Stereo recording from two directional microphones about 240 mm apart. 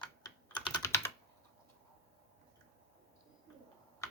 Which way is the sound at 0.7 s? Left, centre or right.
Centre.